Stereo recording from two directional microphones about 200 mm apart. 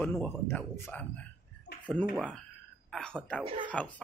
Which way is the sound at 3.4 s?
25° right (ahead or behind).